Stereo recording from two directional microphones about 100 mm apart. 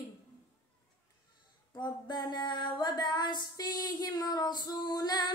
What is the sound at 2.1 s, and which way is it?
Female singing, 50° left (ahead or behind).